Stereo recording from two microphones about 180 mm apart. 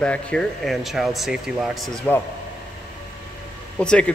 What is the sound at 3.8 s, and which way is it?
Speech, 5° left (ahead or behind).